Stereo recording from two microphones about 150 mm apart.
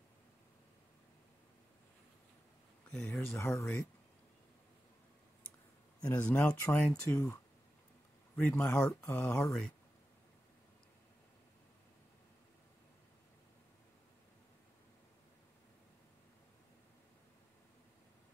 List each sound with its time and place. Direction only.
2.9 s speech: 10° left (ahead or behind)
5.9 s speech: 10° left (ahead or behind)
8.4 s speech: 10° left (ahead or behind)